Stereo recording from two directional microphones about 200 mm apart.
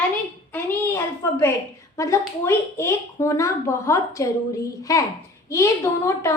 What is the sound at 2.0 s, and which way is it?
A woman's voice, 15° left (ahead or behind).